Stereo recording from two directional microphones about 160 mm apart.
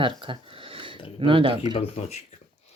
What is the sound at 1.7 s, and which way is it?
Speech, 40° left (ahead or behind).